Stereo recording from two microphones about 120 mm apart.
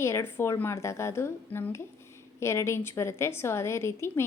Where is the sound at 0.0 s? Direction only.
20° left (ahead or behind).